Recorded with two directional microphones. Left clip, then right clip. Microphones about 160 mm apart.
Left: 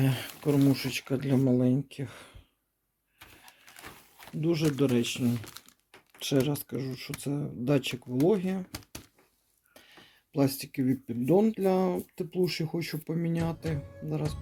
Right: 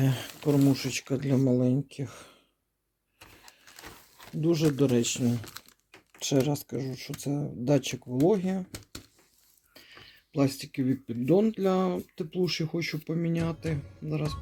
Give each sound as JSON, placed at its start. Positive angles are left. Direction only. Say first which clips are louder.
{"t": 0.0, "sound": "speech", "louder": "right 1 dB", "side_deg": -5}
{"t": 4.4, "sound": "speech", "louder": "right 2 dB", "side_deg": -15}